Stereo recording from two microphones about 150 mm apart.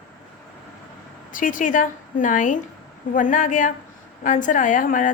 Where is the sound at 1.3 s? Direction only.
60° left (ahead or behind).